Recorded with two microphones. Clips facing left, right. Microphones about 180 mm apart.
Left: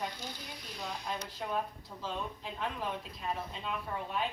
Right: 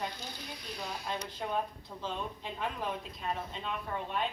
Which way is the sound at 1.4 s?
Centre (ahead or behind).